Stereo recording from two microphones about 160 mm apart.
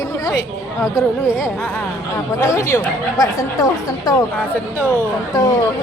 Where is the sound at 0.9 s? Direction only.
20° left (ahead or behind).